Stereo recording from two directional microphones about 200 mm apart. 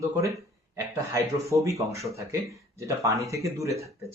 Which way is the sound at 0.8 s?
15° right (ahead or behind).